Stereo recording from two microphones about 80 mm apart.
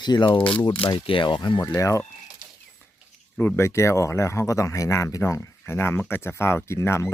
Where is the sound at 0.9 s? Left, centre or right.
Left.